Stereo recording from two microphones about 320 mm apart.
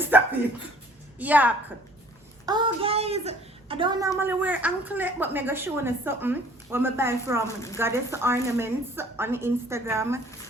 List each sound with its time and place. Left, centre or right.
0.1 s dog: centre
1.2 s a woman's voice: centre
7.4 s a woman's voice: centre
7.8 s a woman's voice: centre